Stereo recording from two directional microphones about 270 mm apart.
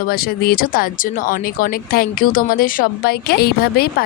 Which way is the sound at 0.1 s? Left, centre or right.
Left.